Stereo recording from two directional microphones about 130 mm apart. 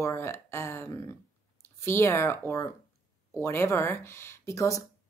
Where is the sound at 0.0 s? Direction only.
20° left (ahead or behind).